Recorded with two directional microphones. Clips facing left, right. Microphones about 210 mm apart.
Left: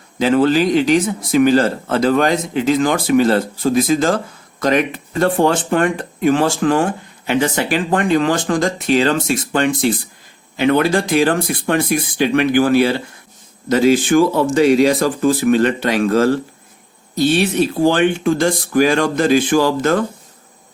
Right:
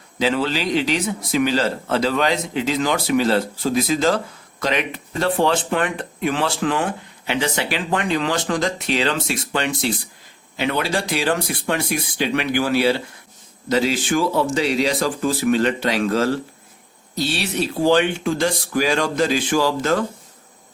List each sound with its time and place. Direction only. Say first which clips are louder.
0.2 s speech: left 7 dB; 50° left (ahead or behind)